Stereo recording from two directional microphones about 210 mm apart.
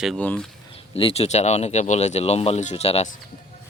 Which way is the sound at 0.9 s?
30° left (ahead or behind).